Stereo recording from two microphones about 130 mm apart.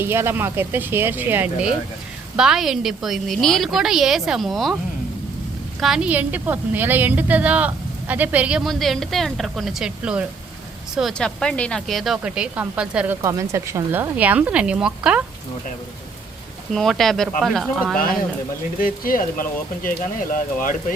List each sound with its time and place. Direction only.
0.0 s a woman's voice: 20° right (ahead or behind); by 4.8 s centre (ahead or behind)
5.8 s a woman's voice: 5° right (ahead or behind)
13.2 s a woman's voice: 20° right (ahead or behind); by 15.2 s 5° right (ahead or behind)
16.7 s a woman's voice: centre (ahead or behind)
18.8 s speech: 90° left